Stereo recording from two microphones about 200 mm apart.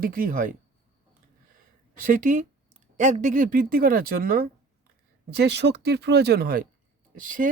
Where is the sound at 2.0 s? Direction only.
40° right (ahead or behind).